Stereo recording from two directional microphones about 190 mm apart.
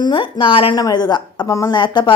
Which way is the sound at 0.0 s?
25° left (ahead or behind).